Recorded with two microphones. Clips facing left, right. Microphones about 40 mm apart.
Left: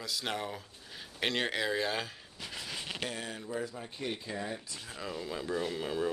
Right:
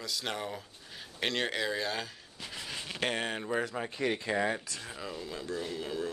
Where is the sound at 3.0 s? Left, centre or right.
Right.